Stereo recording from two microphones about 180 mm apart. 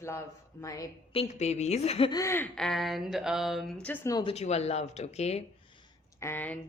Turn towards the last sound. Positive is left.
turn(degrees=10)  # may be behind; listen again after turning